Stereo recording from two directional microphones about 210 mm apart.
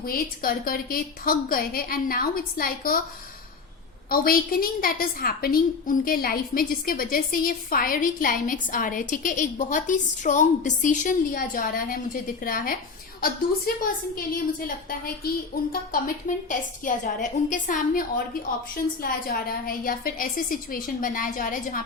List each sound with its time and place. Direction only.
0.0 s a woman's voice: 45° left (ahead or behind)
4.1 s a woman's voice: 45° left (ahead or behind)